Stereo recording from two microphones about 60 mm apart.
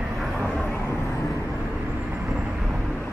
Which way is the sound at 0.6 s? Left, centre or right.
Left.